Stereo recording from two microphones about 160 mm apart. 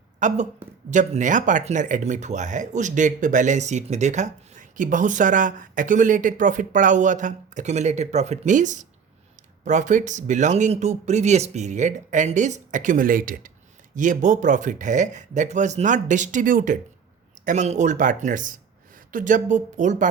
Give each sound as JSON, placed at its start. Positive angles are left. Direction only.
{"t": 0.2, "sound": "a woman's voice", "side_deg": -50}